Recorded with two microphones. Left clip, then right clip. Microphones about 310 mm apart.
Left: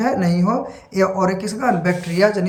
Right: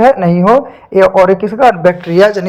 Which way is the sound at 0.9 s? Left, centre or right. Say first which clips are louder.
Right 12 dB; right.